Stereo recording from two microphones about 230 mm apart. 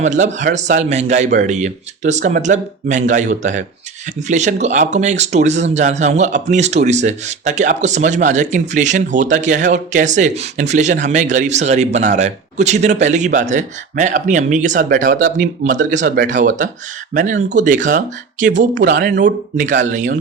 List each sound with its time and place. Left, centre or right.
0.0 s a man's voice: right